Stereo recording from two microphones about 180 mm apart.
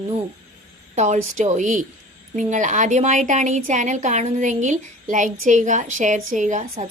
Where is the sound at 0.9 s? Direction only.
40° right (ahead or behind).